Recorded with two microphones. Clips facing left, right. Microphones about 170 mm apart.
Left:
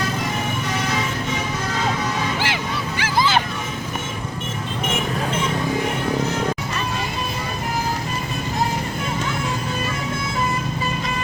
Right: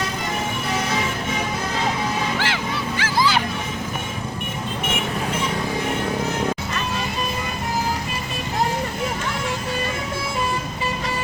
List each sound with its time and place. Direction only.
3.0 s honk: 20° left (ahead or behind)